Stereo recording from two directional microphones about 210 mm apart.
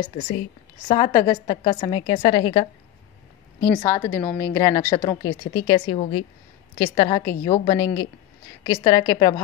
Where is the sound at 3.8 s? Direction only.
10° left (ahead or behind).